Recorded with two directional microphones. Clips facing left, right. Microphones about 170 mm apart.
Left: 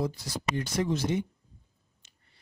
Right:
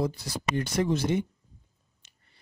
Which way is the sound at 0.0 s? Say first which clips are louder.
Right 2 dB; 60° right (ahead or behind).